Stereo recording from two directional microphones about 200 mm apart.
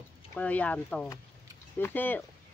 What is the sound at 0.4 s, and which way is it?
Speech, 5° left (ahead or behind).